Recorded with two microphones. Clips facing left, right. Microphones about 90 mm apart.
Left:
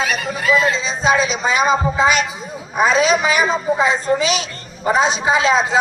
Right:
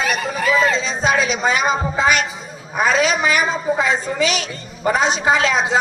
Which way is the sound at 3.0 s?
20° left (ahead or behind).